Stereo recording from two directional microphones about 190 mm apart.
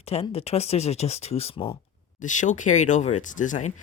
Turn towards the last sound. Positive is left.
turn(degrees=40)  # may be behind; listen again after turning